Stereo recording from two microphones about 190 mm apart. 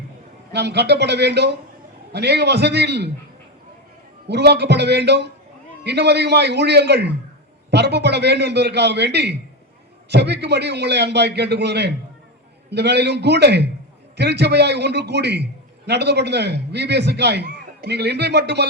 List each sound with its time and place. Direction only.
0.5 s a man's voice: 60° right (ahead or behind)
4.3 s a man's voice: 60° right (ahead or behind)